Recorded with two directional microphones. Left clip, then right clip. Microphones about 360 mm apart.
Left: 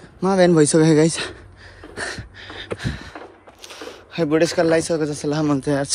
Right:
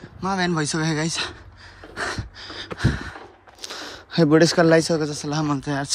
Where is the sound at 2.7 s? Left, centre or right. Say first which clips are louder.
Right 3 dB; right.